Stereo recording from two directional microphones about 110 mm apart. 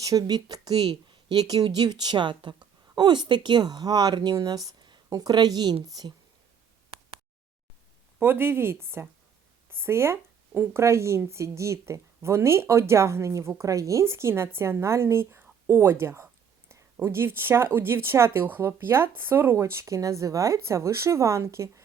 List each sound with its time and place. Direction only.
0.0 s speech: 30° right (ahead or behind)
8.2 s speech: 20° right (ahead or behind)